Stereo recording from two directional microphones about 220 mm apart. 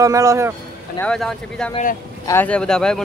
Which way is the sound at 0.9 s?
5° left (ahead or behind).